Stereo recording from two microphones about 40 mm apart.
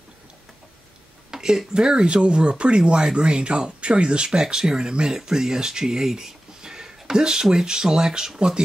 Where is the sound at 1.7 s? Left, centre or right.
Centre.